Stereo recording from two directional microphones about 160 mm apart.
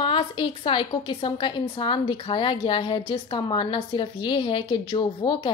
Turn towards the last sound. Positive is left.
turn(degrees=30)  # may be behind; listen again after turning